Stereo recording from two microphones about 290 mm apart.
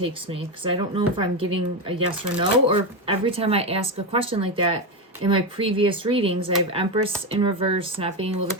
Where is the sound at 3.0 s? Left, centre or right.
Centre.